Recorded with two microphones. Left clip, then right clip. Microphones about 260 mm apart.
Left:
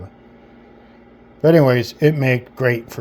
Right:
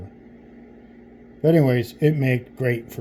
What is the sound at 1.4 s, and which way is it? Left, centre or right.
Speech, left.